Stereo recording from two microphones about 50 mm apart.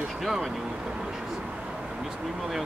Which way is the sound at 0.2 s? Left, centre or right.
Centre.